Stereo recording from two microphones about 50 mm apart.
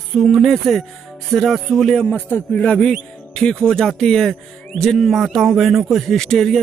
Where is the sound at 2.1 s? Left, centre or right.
Left.